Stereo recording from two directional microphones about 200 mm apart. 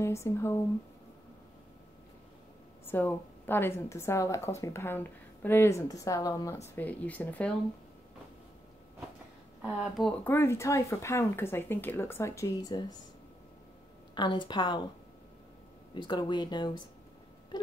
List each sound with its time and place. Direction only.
0.0 s speech: 15° left (ahead or behind)
2.8 s speech: 10° left (ahead or behind)
9.6 s speech: centre (ahead or behind)
10.2 s speech: 10° left (ahead or behind)
14.1 s speech: 20° left (ahead or behind)
15.9 s speech: 20° left (ahead or behind)